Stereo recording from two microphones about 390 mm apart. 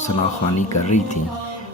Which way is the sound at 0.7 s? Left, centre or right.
Left.